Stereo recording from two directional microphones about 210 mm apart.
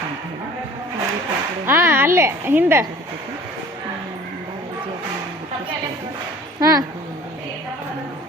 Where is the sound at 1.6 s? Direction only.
10° right (ahead or behind).